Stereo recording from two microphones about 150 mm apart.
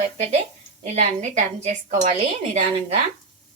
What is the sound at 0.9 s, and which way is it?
A woman's voice, 50° right (ahead or behind).